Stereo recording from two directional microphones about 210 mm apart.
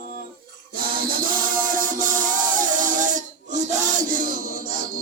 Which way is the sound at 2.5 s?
40° right (ahead or behind).